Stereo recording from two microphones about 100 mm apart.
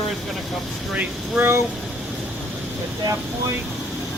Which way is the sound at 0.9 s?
20° right (ahead or behind).